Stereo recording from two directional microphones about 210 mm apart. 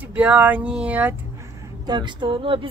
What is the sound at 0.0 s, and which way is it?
Speech, 5° right (ahead or behind).